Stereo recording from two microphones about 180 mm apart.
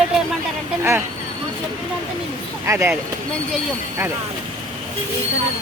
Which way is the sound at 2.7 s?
15° right (ahead or behind).